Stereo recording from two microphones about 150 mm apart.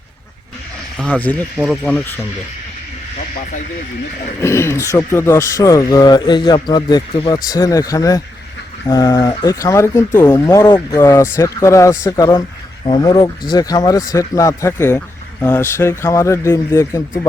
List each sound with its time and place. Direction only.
0.9 s speech: 5° left (ahead or behind)
4.4 s speech: 20° left (ahead or behind)